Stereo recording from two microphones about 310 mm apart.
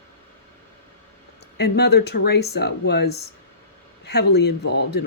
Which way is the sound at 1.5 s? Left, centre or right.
Left.